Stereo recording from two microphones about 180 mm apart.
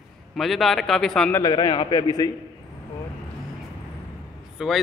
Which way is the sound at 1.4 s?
25° left (ahead or behind).